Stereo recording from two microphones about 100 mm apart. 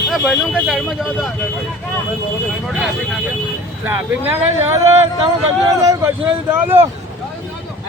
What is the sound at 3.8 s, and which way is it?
Speech, 25° right (ahead or behind).